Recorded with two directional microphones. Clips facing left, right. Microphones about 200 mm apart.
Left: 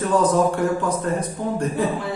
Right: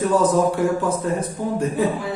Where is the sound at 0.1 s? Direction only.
10° right (ahead or behind).